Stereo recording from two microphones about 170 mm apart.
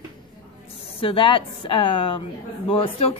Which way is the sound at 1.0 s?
30° left (ahead or behind).